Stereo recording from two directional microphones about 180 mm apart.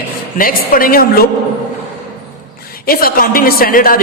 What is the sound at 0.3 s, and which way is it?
Speech, 50° left (ahead or behind).